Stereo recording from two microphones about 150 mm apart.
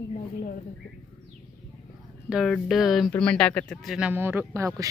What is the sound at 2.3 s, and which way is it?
Speech, centre (ahead or behind).